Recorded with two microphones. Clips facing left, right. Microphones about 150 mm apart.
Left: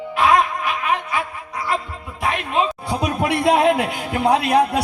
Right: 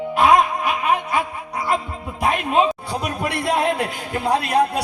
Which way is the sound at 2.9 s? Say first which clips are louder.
Left 4 dB; 60° left (ahead or behind).